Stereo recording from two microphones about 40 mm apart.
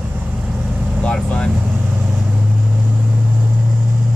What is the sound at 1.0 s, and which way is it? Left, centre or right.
Speech, left.